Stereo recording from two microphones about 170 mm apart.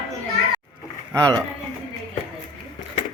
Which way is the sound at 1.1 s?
20° right (ahead or behind).